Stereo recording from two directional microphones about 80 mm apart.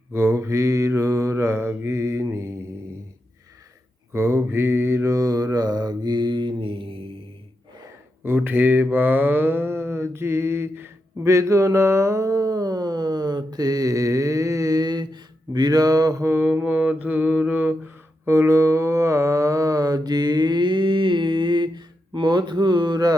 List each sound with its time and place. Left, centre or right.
0.1 s mantra: right
4.1 s mantra: right
8.4 s mantra: right
16.2 s mantra: right
18.3 s mantra: right